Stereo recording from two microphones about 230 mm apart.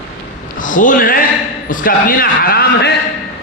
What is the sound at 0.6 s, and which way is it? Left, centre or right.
A man's voice, left.